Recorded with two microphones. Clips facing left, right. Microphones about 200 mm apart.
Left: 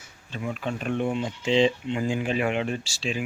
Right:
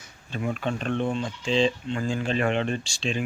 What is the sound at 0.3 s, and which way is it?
Speech, 50° right (ahead or behind).